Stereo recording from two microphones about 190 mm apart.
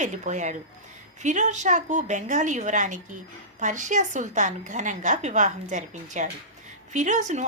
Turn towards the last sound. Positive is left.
turn(degrees=-40)  # may be behind; listen again after turning